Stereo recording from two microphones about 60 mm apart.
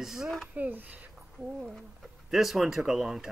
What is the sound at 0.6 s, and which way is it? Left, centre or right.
Speech, right.